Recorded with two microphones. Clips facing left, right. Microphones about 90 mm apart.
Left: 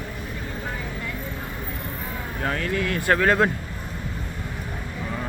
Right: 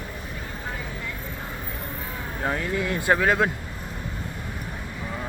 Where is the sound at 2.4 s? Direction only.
15° right (ahead or behind).